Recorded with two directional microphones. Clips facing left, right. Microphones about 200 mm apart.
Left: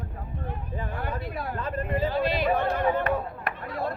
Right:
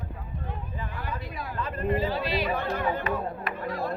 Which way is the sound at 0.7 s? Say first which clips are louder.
Left 5 dB; 50° left (ahead or behind).